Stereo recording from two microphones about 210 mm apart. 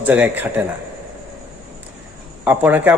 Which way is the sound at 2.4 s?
10° right (ahead or behind).